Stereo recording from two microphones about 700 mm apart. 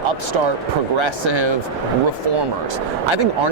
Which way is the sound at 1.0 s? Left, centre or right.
Right.